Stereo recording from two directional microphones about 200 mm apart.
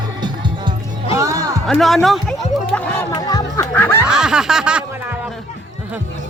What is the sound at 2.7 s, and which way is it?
Music, 5° left (ahead or behind).